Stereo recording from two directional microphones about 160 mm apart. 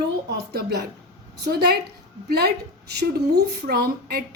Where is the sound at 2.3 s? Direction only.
90° right.